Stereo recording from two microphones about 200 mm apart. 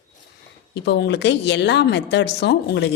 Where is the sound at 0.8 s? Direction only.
55° left (ahead or behind).